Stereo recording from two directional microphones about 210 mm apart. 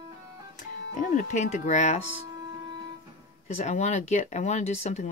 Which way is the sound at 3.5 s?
35° left (ahead or behind).